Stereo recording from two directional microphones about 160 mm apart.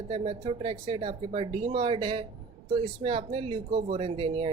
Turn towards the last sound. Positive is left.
turn(degrees=-35)  # may be behind; listen again after turning